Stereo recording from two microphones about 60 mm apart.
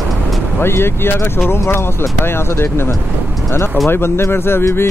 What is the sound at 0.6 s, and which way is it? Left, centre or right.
Speech, left.